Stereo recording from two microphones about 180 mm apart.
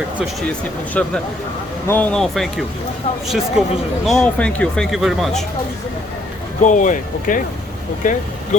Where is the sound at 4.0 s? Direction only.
5° left (ahead or behind).